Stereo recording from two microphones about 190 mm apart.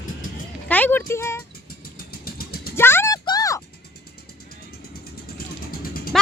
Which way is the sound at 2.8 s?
10° left (ahead or behind).